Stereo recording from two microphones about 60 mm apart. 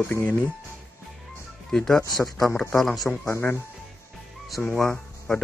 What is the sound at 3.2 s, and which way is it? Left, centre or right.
Speech, left.